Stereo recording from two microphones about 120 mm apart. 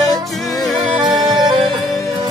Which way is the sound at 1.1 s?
40° right (ahead or behind).